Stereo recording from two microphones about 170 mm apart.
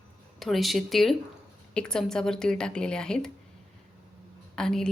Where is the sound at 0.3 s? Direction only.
Centre (ahead or behind).